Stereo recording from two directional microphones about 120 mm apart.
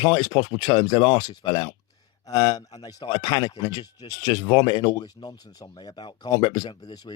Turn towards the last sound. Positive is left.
turn(degrees=40)  # may be behind; listen again after turning